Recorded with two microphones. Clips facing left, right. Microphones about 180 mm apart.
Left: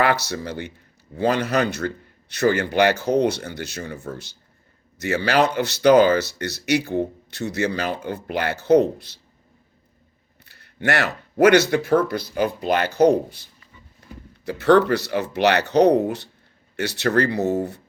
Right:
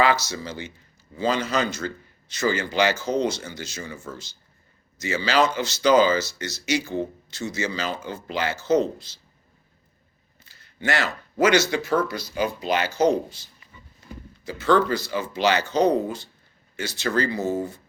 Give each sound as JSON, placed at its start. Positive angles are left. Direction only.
{"t": 0.0, "sound": "speech", "side_deg": 60}
{"t": 10.4, "sound": "speech", "side_deg": 65}